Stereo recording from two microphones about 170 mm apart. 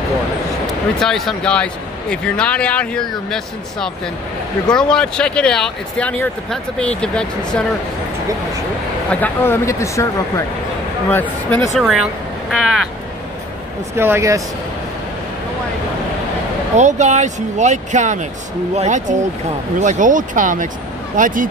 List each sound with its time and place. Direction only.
0.9 s speech: centre (ahead or behind)
9.1 s speech: 10° left (ahead or behind)
11.7 s speech: centre (ahead or behind)
13.9 s speech: 15° right (ahead or behind)
16.7 s speech: 45° right (ahead or behind)